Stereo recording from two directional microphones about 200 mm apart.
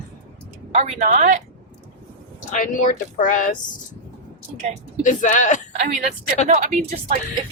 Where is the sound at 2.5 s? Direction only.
40° left (ahead or behind).